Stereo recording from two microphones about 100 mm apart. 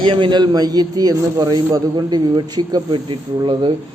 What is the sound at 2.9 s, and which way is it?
Speech, 55° right (ahead or behind).